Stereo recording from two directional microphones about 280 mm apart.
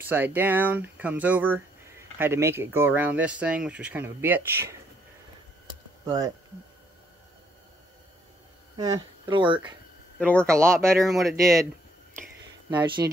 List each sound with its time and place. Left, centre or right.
0.0 s speech: centre
6.0 s speech: centre
8.7 s speech: centre
10.1 s speech: centre
10.4 s speech: centre
12.6 s speech: centre